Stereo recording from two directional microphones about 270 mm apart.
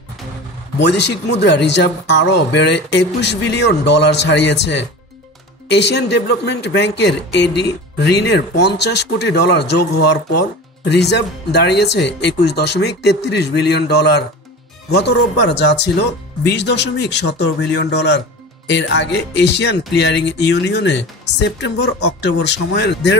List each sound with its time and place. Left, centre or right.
0.7 s a man's voice: left